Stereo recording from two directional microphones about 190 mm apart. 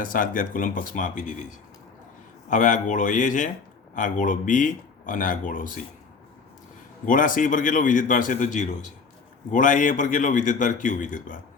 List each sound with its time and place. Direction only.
0.0 s speech: 45° left (ahead or behind)
7.0 s speech: 45° left (ahead or behind)